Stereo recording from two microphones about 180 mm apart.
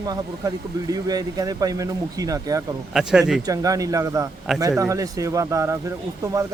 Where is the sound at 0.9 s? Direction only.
20° right (ahead or behind).